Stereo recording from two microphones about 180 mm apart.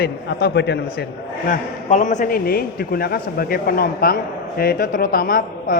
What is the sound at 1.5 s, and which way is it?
A man's voice, 45° left (ahead or behind).